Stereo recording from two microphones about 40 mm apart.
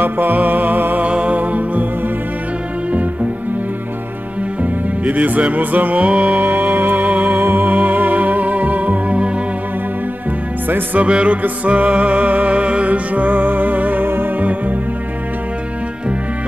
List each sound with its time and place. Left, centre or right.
0.0 s music: right
1.0 s music: right
4.6 s music: right
6.4 s music: right
11.0 s music: right